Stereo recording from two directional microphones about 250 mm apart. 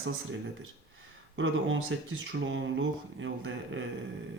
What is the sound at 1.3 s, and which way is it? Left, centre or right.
Speech, right.